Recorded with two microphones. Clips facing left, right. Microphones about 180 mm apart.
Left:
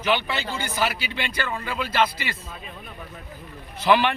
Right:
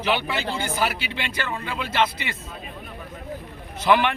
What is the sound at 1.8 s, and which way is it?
Speech, 25° right (ahead or behind).